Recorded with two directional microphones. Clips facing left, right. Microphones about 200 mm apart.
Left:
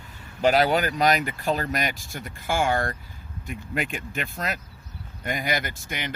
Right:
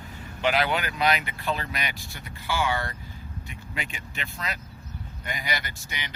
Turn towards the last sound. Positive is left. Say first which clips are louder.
# left 6 dB
turn(degrees=50)  # may be behind; listen again after turning